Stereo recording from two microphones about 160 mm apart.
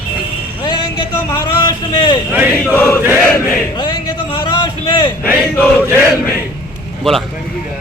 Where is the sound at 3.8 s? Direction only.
30° left (ahead or behind).